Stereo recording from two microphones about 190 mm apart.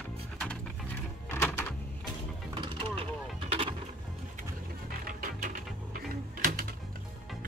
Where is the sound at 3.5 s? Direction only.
30° right (ahead or behind).